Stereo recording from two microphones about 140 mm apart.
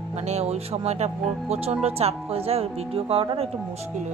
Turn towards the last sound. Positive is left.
turn(degrees=-40)  # may be behind; listen again after turning